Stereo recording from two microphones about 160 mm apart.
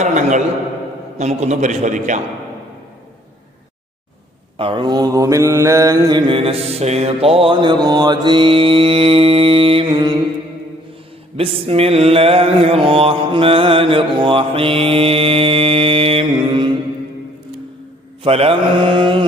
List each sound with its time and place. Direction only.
0.0 s a sound: 50° right (ahead or behind)
1.2 s a man's voice: 45° right (ahead or behind)
4.5 s mantra: 30° right (ahead or behind)
11.3 s mantra: 35° right (ahead or behind)
18.2 s mantra: 40° right (ahead or behind)